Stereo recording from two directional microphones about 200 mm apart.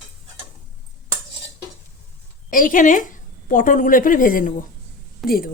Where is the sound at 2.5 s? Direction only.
45° left (ahead or behind).